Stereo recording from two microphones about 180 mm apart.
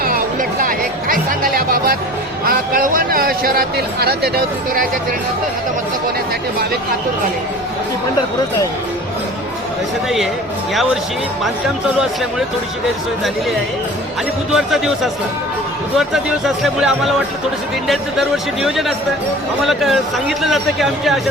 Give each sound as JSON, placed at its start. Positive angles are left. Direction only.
{"t": 0.6, "sound": "music", "side_deg": -50}
{"t": 2.4, "sound": "speech", "side_deg": -50}
{"t": 14.5, "sound": "speech", "side_deg": 0}